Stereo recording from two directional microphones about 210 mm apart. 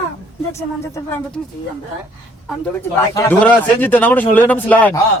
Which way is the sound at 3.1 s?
10° left (ahead or behind).